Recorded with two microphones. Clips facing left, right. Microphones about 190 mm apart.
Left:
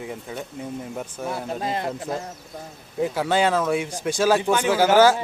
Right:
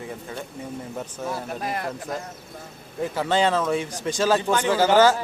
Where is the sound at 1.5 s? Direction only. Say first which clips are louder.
Left 2 dB; 25° left (ahead or behind).